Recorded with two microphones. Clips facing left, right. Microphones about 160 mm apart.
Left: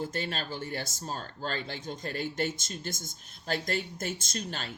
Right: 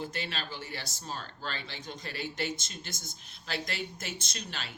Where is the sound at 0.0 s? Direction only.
45° left (ahead or behind).